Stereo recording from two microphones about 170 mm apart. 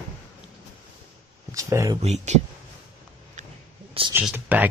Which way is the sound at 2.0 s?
40° right (ahead or behind).